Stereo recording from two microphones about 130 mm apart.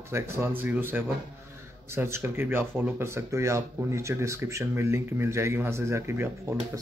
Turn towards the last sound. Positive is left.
turn(degrees=-20)  # may be behind; listen again after turning